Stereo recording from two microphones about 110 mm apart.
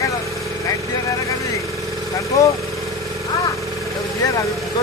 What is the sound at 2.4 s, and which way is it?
Vehicle, 30° left (ahead or behind).